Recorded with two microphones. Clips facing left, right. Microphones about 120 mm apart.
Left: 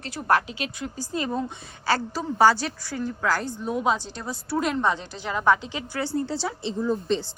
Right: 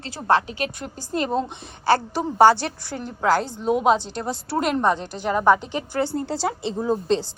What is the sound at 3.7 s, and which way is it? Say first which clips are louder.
Speech: right 5 dB; 70° right (ahead or behind).